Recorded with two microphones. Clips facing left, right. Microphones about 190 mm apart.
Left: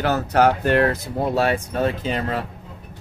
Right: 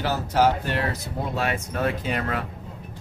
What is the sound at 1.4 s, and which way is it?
Speech, 30° left (ahead or behind).